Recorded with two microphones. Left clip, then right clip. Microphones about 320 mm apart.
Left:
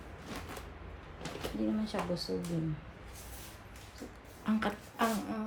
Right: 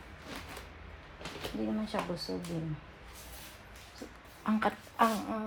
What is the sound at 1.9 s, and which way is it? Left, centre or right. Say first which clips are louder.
Speech: right 5 dB; centre.